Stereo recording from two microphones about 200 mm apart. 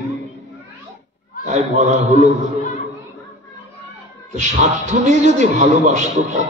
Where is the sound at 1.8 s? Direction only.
35° right (ahead or behind).